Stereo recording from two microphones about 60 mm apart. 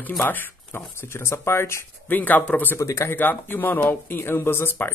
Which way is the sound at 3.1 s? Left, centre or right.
Left.